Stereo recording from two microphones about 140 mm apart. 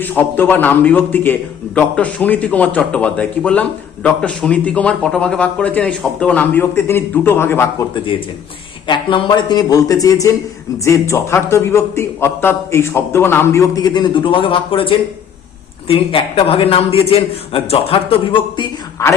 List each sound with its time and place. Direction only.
0.0 s a man's voice: 15° left (ahead or behind)
7.9 s a man's voice: 35° left (ahead or behind)
19.0 s a man's voice: 20° left (ahead or behind)